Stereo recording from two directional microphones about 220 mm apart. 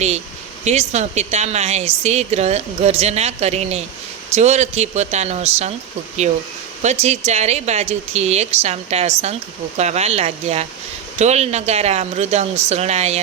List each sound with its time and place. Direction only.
0.6 s speech: 30° right (ahead or behind)
6.8 s speech: 30° right (ahead or behind)